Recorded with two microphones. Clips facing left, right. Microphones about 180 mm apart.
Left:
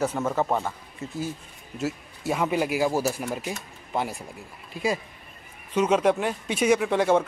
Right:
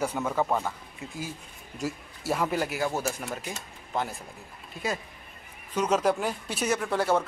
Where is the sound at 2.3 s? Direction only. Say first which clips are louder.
Left 4 dB; 5° left (ahead or behind).